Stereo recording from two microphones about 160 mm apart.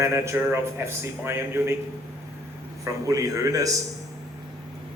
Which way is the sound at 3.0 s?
20° right (ahead or behind).